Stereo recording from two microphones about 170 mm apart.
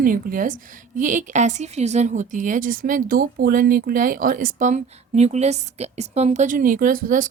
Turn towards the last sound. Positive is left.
turn(degrees=-50)  # may be behind; listen again after turning